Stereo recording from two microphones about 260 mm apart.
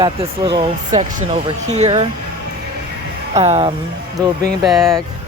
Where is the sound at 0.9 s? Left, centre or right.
Right.